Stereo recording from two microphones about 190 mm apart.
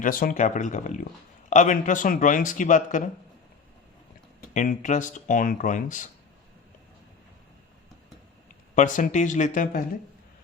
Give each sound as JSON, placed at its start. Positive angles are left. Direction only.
{"t": 0.0, "sound": "speech", "side_deg": 45}
{"t": 4.5, "sound": "speech", "side_deg": 40}
{"t": 8.7, "sound": "speech", "side_deg": 40}